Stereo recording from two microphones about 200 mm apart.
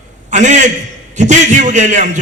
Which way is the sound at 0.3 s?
35° right (ahead or behind).